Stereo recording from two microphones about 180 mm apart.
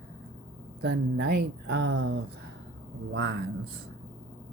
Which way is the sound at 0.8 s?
70° right (ahead or behind).